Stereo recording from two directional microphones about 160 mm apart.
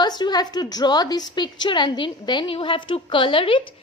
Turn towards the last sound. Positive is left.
turn(degrees=30)  # may be behind; listen again after turning